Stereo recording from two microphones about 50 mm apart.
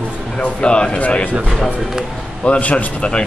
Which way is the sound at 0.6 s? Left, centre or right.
Centre.